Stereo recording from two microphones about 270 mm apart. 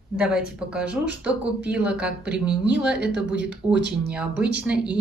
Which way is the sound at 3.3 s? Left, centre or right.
Right.